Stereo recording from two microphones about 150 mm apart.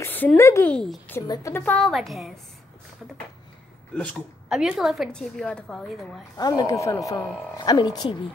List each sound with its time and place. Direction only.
0.0 s speech: 10° left (ahead or behind)
0.7 s a woman's voice: 5° left (ahead or behind)
1.2 s a woman's voice: 25° left (ahead or behind)
1.5 s speech: 15° left (ahead or behind)
1.8 s a woman's voice: centre (ahead or behind)
3.9 s speech: 10° left (ahead or behind)
4.5 s a woman's voice: 5° right (ahead or behind)
6.3 s a woman's voice: 25° left (ahead or behind)